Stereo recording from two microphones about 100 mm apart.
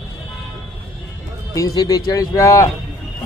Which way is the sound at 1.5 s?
35° left (ahead or behind).